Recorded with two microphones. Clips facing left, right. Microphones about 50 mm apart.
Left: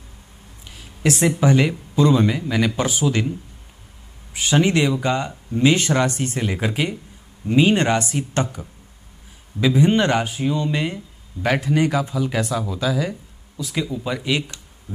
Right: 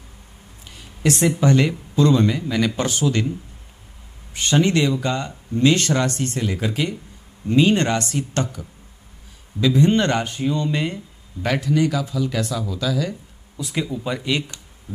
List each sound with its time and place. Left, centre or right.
0.7 s speech: centre
11.4 s speech: centre
11.7 s speech: left
13.6 s speech: centre